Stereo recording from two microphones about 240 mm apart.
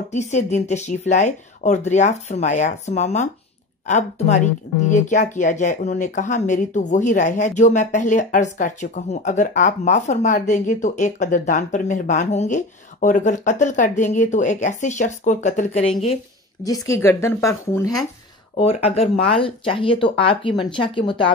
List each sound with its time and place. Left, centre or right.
0.1 s speech: left
16.6 s speech: centre
18.6 s speech: left